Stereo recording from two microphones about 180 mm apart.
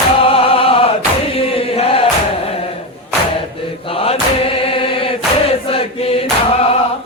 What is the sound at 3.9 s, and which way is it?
Chant, 30° left (ahead or behind).